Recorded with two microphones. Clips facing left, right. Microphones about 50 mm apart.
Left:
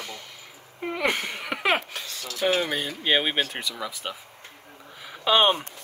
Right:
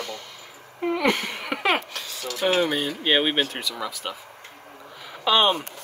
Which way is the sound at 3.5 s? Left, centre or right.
Centre.